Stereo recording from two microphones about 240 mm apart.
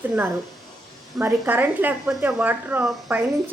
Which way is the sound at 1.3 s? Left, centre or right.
Centre.